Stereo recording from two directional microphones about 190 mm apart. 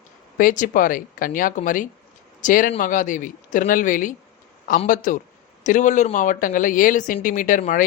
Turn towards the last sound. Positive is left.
turn(degrees=40)  # may be behind; listen again after turning